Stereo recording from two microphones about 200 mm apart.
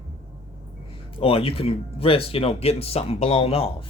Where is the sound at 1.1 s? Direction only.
25° left (ahead or behind).